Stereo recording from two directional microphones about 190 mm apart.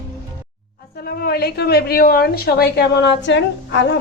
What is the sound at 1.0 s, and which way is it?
A woman's voice, 55° left (ahead or behind).